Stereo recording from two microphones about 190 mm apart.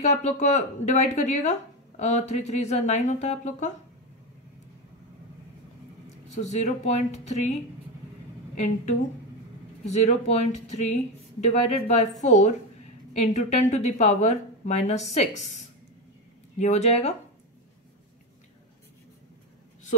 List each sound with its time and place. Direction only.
0.0 s a woman's voice: 40° left (ahead or behind)
6.0 s speech: 40° left (ahead or behind)
9.8 s a woman's voice: 35° left (ahead or behind)